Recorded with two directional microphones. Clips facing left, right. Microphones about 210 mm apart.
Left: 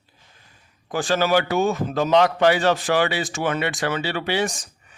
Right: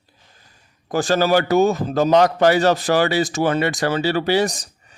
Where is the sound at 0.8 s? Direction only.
40° right (ahead or behind).